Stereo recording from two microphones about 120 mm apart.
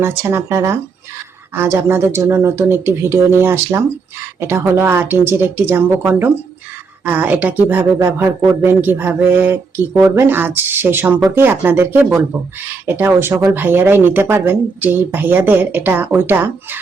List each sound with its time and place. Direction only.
0.0 s speech: 20° right (ahead or behind)